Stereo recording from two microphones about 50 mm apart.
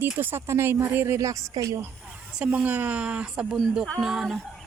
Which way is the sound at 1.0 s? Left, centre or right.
Right.